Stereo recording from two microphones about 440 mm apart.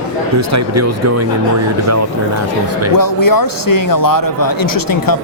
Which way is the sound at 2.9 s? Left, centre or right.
Left.